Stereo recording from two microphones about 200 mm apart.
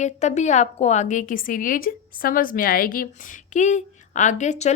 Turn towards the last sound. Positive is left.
turn(degrees=35)  # may be behind; listen again after turning